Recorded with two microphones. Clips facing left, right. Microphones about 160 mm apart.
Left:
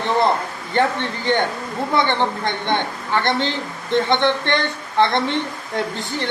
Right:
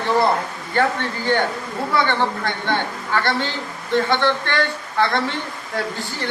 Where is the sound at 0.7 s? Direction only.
20° left (ahead or behind).